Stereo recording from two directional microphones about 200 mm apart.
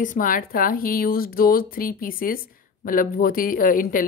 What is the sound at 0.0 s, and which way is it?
A woman's voice, 40° left (ahead or behind).